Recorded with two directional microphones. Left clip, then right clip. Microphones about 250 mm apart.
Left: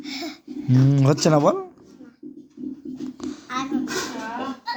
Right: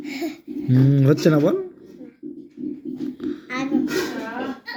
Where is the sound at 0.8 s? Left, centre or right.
Left.